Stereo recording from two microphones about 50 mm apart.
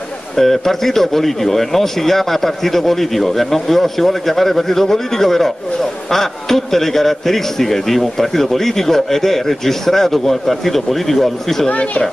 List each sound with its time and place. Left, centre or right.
0.4 s speech: centre
11.7 s speech: left